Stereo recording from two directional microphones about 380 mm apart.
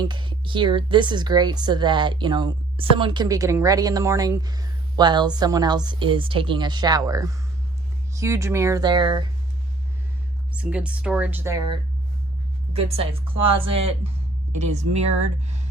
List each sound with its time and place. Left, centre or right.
0.0 s speech: centre
10.5 s speech: centre
12.7 s speech: centre